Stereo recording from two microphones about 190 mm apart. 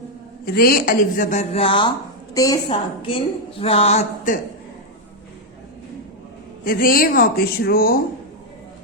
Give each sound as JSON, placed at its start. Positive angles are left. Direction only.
{"t": 0.4, "sound": "a woman's voice", "side_deg": 50}
{"t": 6.7, "sound": "a woman's voice", "side_deg": 50}